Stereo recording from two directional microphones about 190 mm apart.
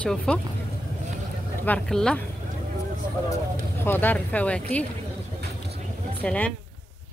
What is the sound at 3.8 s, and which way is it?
Speech, 10° left (ahead or behind).